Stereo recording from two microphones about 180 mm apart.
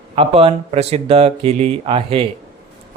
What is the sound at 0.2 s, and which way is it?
Speech, 30° right (ahead or behind).